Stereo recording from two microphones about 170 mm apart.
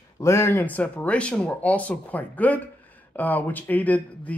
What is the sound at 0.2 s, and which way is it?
Speech, 15° left (ahead or behind).